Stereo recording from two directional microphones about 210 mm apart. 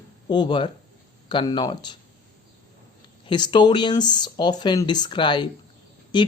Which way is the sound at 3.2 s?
20° left (ahead or behind).